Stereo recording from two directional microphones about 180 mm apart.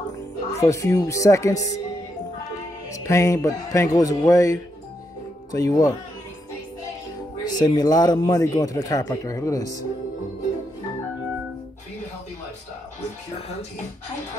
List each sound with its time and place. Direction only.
0.5 s speech: 15° left (ahead or behind)
2.9 s speech: 15° left (ahead or behind)
7.4 s speech: 20° left (ahead or behind)